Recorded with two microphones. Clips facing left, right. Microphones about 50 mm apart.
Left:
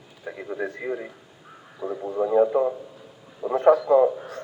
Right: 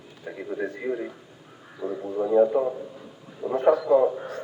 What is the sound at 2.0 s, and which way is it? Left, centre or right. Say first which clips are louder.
Speech: even; centre.